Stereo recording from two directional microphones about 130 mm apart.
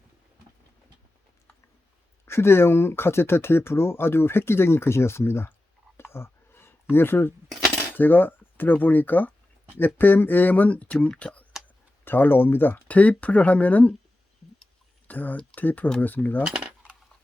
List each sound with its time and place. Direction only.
2.2 s speech: 20° left (ahead or behind)
6.0 s a sound: 20° left (ahead or behind)
7.9 s speech: 15° left (ahead or behind)
15.0 s speech: 15° left (ahead or behind)